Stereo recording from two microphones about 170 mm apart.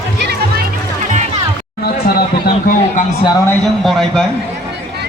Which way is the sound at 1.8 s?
65° left (ahead or behind).